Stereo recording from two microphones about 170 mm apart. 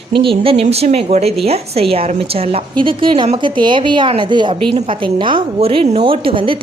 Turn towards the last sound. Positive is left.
turn(degrees=-30)  # may be behind; listen again after turning